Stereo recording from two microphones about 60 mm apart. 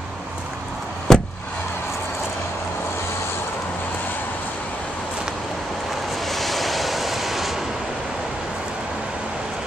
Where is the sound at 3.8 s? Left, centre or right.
Left.